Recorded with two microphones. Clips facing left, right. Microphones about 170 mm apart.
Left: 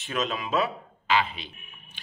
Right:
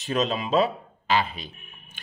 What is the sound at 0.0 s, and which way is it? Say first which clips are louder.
Speech: right 4 dB; 35° right (ahead or behind).